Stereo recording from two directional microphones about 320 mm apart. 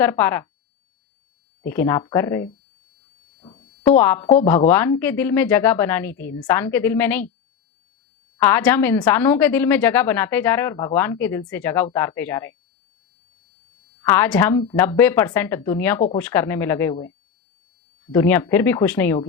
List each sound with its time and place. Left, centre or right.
0.0 s a woman's voice: centre
1.6 s a woman's voice: centre
3.4 s a sound: centre
3.9 s a woman's voice: centre
8.4 s a woman's voice: centre
14.0 s a woman's voice: centre
18.1 s a woman's voice: centre